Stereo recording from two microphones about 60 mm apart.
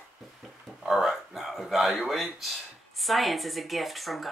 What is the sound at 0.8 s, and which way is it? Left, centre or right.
Speech, centre.